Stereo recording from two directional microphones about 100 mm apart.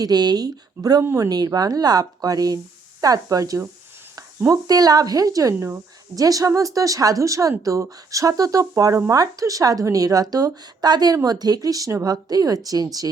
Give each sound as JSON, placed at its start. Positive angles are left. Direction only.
{"t": 0.0, "sound": "speech", "side_deg": -40}